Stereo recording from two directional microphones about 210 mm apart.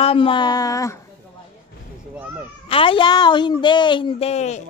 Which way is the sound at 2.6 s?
25° left (ahead or behind).